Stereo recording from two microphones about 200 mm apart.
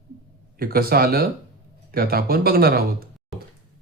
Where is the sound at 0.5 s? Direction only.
50° right (ahead or behind).